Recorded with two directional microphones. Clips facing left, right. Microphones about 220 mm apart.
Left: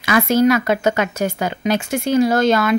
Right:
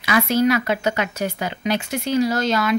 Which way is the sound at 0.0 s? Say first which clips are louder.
Left 3 dB; 50° left (ahead or behind).